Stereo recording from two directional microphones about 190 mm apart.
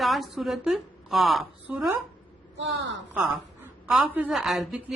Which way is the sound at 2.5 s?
70° right (ahead or behind).